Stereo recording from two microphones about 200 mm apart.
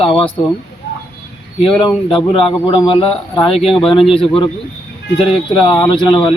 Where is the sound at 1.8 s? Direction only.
25° left (ahead or behind).